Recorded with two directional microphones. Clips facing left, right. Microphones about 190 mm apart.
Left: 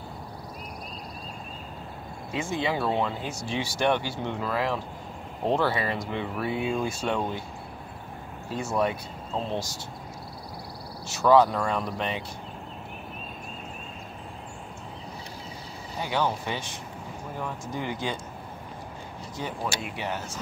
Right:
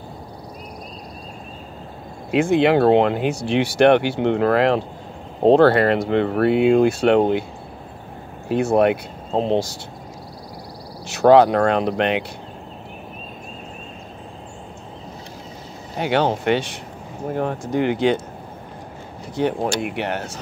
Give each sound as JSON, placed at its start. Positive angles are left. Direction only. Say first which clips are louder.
{"t": 2.3, "sound": "speech", "louder": "right 13 dB", "side_deg": -65}
{"t": 8.5, "sound": "speech", "louder": "right 11 dB", "side_deg": -65}
{"t": 11.1, "sound": "speech", "louder": "right 7 dB", "side_deg": -70}
{"t": 16.0, "sound": "speech", "louder": "right 8 dB", "side_deg": -75}
{"t": 19.3, "sound": "speech", "louder": "right 12 dB", "side_deg": -65}